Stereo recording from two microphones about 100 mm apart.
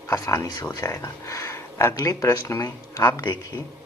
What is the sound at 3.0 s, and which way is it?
Speech, 40° left (ahead or behind).